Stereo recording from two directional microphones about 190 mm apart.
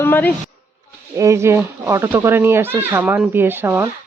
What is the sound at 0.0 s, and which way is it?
Speech, 10° left (ahead or behind).